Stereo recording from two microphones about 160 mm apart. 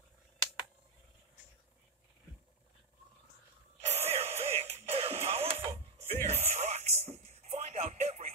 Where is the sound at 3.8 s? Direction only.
40° right (ahead or behind).